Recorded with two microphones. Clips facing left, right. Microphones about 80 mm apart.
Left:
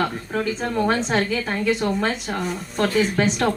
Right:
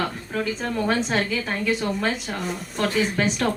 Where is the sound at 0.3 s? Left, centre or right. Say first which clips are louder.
Left 3 dB; left.